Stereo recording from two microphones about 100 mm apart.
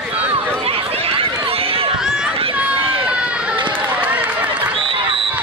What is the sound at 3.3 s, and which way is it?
Run, 10° right (ahead or behind).